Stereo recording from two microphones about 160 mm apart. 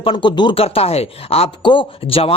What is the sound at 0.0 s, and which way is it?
Speech, 30° left (ahead or behind).